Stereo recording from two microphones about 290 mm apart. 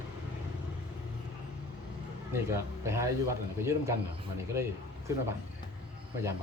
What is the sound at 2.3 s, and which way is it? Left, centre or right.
Speech, centre.